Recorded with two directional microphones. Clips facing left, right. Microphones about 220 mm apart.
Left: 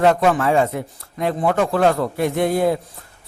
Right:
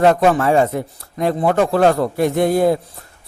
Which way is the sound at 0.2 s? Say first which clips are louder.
Right 3 dB; 40° right (ahead or behind).